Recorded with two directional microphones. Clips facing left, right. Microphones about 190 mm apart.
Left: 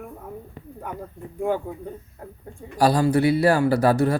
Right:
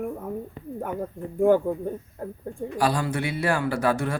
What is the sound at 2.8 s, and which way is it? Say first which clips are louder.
A man's voice: left 7 dB; 35° left (ahead or behind).